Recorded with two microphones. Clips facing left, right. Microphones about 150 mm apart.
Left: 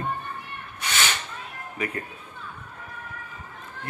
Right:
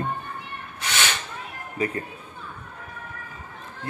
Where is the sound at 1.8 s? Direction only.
30° right (ahead or behind).